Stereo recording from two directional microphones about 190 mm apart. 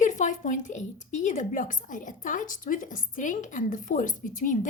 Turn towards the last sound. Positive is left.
turn(degrees=45)  # may be behind; listen again after turning